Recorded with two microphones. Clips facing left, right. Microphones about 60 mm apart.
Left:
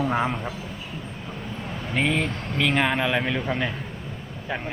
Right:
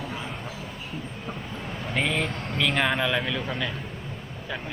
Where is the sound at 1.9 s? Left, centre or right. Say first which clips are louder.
Left 3 dB; centre.